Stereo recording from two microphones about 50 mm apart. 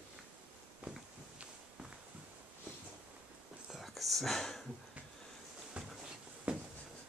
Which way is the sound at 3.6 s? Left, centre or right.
Centre.